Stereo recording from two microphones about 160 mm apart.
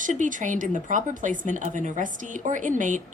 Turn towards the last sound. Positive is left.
turn(degrees=-50)  # may be behind; listen again after turning